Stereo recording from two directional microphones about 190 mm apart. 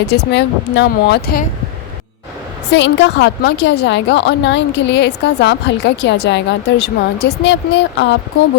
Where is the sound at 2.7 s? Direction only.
70° left (ahead or behind).